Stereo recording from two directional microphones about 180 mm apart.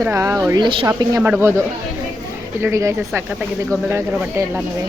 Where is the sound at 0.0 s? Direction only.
15° right (ahead or behind).